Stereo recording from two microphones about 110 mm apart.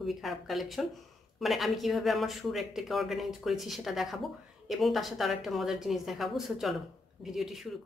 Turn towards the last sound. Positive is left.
turn(degrees=0)  # may be behind; listen again after turning